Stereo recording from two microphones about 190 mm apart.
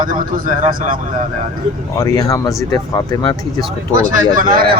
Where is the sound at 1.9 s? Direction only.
20° left (ahead or behind).